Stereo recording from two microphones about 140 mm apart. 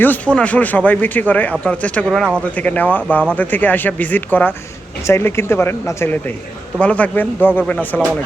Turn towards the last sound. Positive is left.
turn(degrees=10)  # may be behind; listen again after turning